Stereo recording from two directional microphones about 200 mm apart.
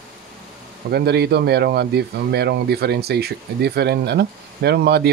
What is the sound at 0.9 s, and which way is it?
Speech, 55° right (ahead or behind).